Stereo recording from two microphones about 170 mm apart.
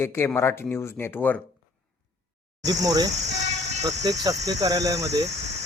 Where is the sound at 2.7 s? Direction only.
20° right (ahead or behind).